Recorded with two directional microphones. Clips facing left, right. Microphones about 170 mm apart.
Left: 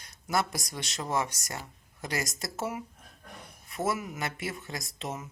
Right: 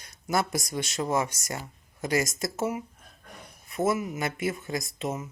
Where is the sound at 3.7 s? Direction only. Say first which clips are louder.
Right 5 dB; 20° right (ahead or behind).